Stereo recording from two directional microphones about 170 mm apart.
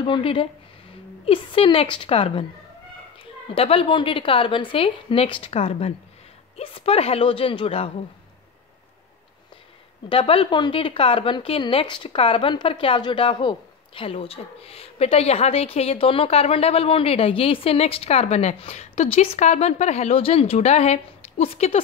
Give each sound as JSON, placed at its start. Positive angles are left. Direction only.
{"t": 0.0, "sound": "a woman's voice", "side_deg": 30}
{"t": 3.5, "sound": "a woman's voice", "side_deg": 35}
{"t": 10.0, "sound": "a woman's voice", "side_deg": 35}